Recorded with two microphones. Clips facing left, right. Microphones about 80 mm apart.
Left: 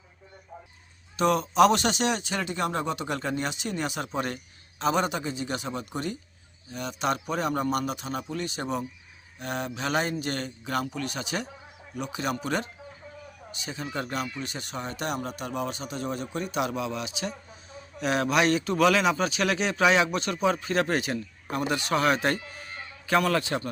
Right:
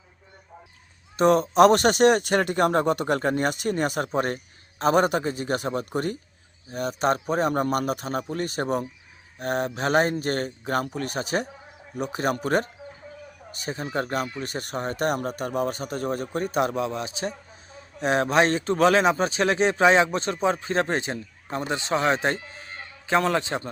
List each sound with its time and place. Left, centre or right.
1.1 s a man's voice: right